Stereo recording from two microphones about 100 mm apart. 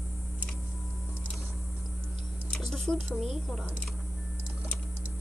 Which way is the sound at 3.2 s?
Centre (ahead or behind).